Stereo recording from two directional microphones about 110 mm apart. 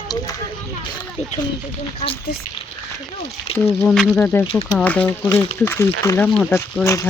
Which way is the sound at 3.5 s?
65° left (ahead or behind).